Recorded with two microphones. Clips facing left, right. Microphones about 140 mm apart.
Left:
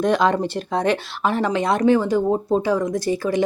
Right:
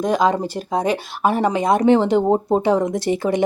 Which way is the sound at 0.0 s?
10° right (ahead or behind).